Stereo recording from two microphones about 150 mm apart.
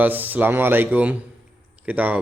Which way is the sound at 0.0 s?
10° right (ahead or behind).